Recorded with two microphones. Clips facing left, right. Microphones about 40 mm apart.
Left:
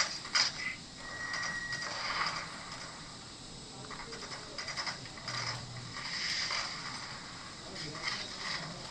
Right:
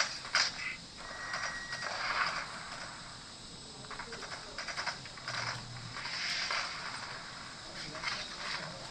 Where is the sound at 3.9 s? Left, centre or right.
Centre.